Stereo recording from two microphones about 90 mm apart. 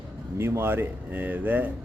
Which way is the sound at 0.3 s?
30° right (ahead or behind).